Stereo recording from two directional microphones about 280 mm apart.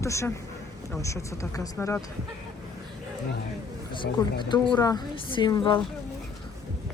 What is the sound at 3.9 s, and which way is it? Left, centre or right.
Speech, centre.